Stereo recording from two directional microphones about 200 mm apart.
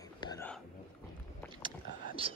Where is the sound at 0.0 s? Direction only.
20° left (ahead or behind).